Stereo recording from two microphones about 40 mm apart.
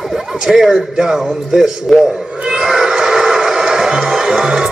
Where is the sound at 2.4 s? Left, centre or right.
Right.